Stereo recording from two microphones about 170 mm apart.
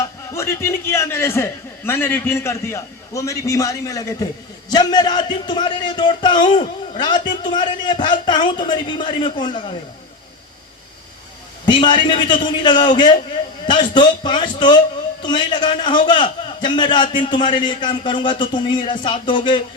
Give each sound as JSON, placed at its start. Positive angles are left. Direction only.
{"t": 0.0, "sound": "a man's voice", "side_deg": 15}
{"t": 11.6, "sound": "speech", "side_deg": 25}